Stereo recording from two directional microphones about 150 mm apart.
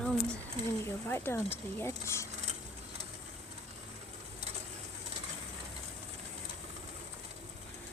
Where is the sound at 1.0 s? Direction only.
15° left (ahead or behind).